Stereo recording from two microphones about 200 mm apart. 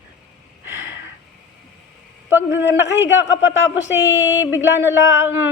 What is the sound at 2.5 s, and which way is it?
Speech, 65° left (ahead or behind).